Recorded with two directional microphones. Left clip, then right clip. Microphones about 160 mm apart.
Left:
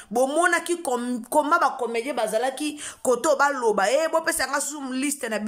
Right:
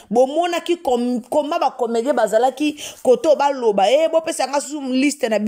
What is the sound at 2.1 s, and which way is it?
Speech, 15° right (ahead or behind).